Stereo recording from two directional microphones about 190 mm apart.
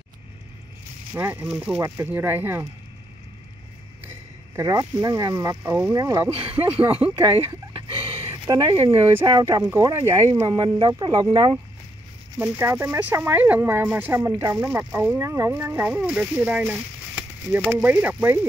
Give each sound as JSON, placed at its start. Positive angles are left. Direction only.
{"t": 1.1, "sound": "speech", "side_deg": -10}
{"t": 4.6, "sound": "speech", "side_deg": -15}